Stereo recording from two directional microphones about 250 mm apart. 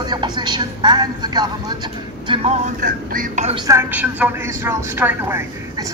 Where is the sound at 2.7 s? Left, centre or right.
Right.